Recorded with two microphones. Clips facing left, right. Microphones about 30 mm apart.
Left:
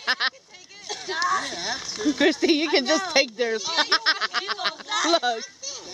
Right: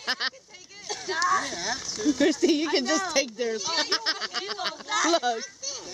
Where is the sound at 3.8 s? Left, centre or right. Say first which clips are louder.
Left 10 dB; left.